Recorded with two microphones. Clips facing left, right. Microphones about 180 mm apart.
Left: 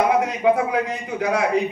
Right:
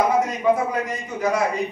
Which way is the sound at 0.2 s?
70° left (ahead or behind).